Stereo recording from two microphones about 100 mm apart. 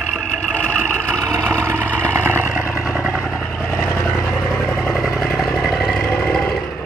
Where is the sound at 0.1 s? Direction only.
15° left (ahead or behind).